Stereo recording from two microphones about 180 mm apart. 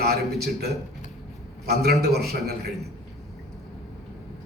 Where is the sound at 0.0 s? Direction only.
65° right (ahead or behind).